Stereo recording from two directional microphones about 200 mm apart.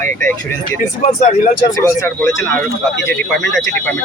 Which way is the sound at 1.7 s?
15° left (ahead or behind).